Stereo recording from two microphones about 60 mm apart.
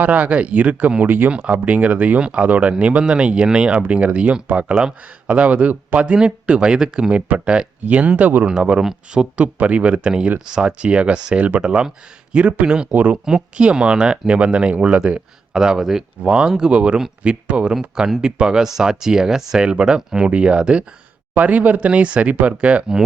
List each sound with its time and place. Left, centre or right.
0.0 s speech: right
1.3 s speech: centre
9.4 s speech: right
12.9 s speech: right
13.2 s speech: centre